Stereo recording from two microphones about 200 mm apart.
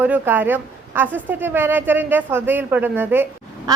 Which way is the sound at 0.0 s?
10° right (ahead or behind).